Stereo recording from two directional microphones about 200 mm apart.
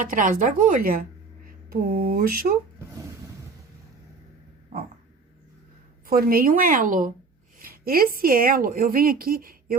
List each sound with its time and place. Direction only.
0.0 s a woman's voice: 40° right (ahead or behind)
2.7 s a sound: 15° right (ahead or behind)
6.1 s a woman's voice: 45° right (ahead or behind)